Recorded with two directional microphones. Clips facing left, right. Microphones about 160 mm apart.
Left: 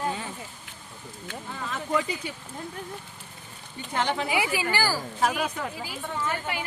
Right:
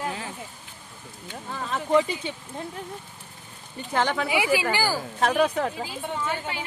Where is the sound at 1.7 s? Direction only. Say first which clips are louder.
Right 6 dB; 25° right (ahead or behind).